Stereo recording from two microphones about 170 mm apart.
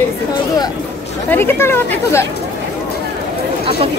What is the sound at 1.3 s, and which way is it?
Speech, 15° left (ahead or behind).